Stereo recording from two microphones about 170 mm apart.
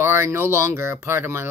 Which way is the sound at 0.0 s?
15° right (ahead or behind).